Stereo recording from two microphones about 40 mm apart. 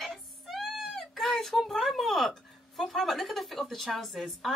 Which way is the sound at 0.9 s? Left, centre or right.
Centre.